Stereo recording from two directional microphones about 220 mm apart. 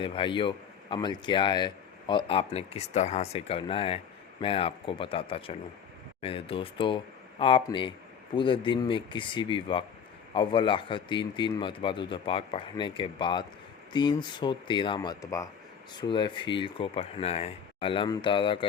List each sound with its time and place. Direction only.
0.0 s speech: 20° left (ahead or behind)